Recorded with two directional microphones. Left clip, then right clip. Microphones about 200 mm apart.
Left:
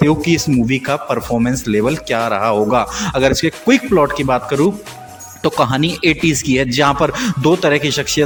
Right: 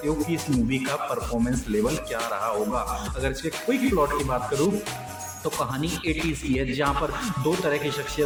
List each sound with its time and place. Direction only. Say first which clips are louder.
0.3 s speech: left 11 dB; 50° left (ahead or behind)